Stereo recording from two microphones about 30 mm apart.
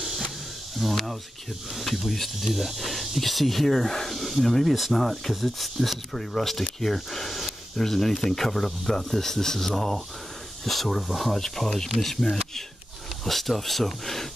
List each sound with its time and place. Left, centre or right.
0.8 s speech: centre
11.3 s speech: centre